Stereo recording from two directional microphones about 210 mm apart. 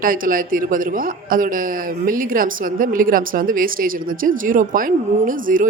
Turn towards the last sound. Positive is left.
turn(degrees=-40)  # may be behind; listen again after turning